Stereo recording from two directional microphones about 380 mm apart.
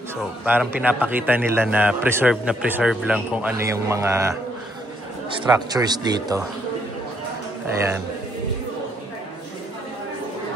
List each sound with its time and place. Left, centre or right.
0.5 s a man's voice: centre
5.4 s speech: centre